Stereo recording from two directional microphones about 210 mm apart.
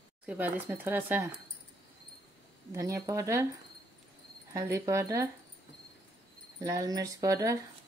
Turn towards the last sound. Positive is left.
turn(degrees=-15)  # may be behind; listen again after turning